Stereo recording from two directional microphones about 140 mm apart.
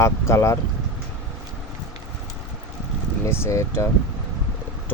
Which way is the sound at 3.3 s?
20° left (ahead or behind).